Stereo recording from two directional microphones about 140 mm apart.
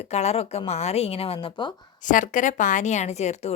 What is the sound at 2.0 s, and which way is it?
A woman's voice, 65° left (ahead or behind).